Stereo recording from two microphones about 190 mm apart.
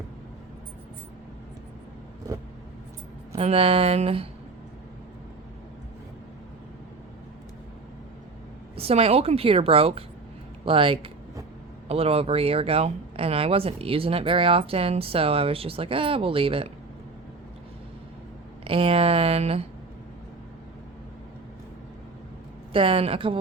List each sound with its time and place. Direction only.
3.3 s speech: 30° right (ahead or behind)
8.7 s a woman's voice: 30° right (ahead or behind)
18.6 s a woman's voice: 30° right (ahead or behind)
22.7 s speech: 30° right (ahead or behind)